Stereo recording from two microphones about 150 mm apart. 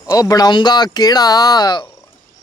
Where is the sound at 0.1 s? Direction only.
25° left (ahead or behind).